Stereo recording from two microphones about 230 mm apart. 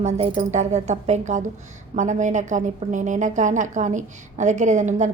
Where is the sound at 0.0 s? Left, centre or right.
Right.